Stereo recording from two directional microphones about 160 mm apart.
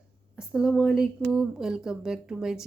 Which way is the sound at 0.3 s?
5° right (ahead or behind).